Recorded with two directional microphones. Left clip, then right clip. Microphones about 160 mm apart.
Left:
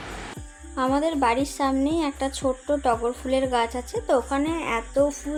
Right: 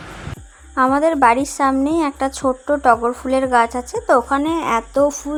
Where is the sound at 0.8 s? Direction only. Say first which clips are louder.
Right 9 dB; 30° right (ahead or behind).